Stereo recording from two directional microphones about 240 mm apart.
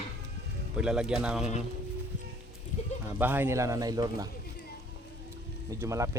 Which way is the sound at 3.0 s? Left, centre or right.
Centre.